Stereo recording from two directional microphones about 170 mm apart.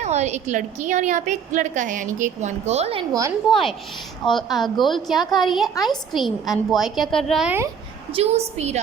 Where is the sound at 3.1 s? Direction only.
20° right (ahead or behind).